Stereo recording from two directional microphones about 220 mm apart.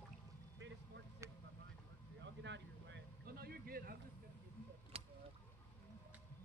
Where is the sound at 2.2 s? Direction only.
55° right (ahead or behind).